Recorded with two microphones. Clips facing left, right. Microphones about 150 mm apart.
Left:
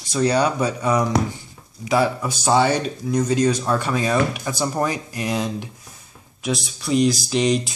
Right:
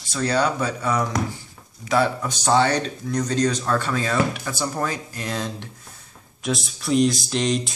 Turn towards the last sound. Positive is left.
turn(degrees=0)  # may be behind; listen again after turning